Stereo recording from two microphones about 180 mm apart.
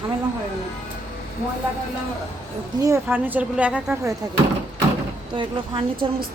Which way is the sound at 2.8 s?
15° right (ahead or behind).